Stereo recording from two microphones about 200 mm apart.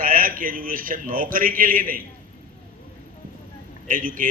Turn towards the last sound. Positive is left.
turn(degrees=-45)  # may be behind; listen again after turning